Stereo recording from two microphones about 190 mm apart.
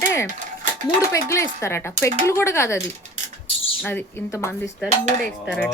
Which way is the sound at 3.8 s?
10° left (ahead or behind).